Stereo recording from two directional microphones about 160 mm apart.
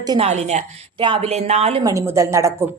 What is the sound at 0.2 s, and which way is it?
A woman's voice, 45° right (ahead or behind).